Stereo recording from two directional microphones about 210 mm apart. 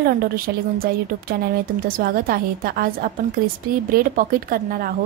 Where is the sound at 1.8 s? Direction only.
45° right (ahead or behind).